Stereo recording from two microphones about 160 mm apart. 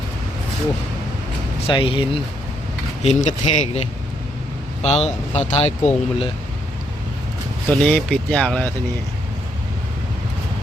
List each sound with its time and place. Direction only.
1.6 s speech: 35° left (ahead or behind)
3.0 s speech: 45° left (ahead or behind)
7.7 s speech: 5° left (ahead or behind)